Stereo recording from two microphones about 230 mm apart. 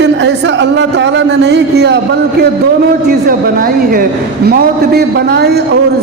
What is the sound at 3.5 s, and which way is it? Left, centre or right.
A man's voice, right.